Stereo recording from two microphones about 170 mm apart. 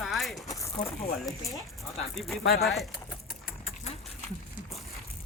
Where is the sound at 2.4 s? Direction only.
65° left (ahead or behind).